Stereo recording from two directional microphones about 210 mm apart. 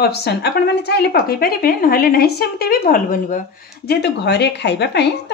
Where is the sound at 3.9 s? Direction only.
55° left (ahead or behind).